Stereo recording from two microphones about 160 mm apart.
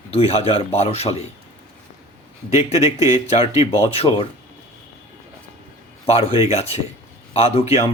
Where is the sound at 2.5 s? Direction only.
45° left (ahead or behind).